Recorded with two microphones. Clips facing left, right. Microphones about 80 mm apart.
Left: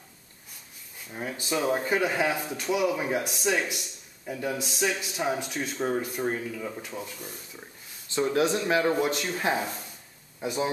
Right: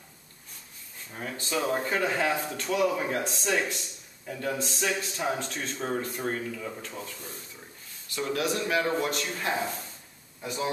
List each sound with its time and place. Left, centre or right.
1.1 s speech: centre
8.1 s speech: left